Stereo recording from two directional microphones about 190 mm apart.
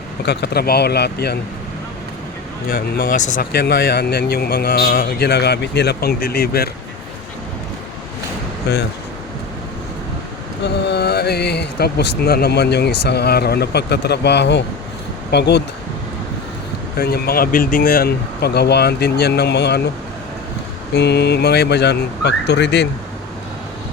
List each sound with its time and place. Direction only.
0.3 s speech: 60° left (ahead or behind)
2.6 s speech: 50° left (ahead or behind)
10.6 s speech: 60° left (ahead or behind)
17.0 s speech: 55° left (ahead or behind)
20.9 s speech: 60° left (ahead or behind)